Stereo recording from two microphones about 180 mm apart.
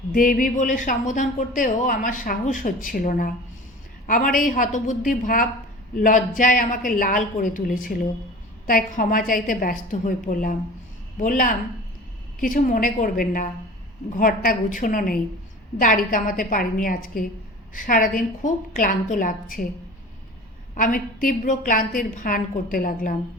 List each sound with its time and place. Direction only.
0.1 s speech: 50° left (ahead or behind)
20.7 s speech: 50° left (ahead or behind)